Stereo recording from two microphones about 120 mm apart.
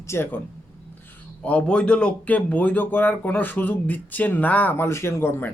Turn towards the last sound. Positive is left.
turn(degrees=20)  # may be behind; listen again after turning